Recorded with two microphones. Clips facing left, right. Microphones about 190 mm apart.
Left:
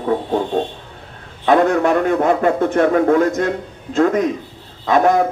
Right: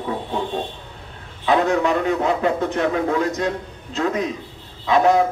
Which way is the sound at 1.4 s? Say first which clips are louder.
Left 4 dB; 50° left (ahead or behind).